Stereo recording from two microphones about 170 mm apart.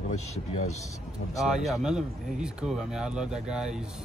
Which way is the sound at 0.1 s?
40° left (ahead or behind).